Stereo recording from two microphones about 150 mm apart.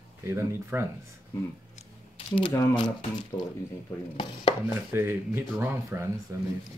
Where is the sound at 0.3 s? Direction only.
15° right (ahead or behind).